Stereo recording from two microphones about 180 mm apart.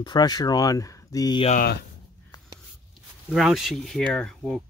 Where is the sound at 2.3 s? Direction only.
20° left (ahead or behind).